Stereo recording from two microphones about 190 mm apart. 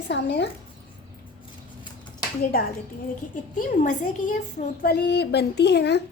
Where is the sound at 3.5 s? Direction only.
40° left (ahead or behind).